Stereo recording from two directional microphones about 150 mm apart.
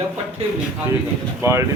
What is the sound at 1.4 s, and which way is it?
Speech, 15° right (ahead or behind).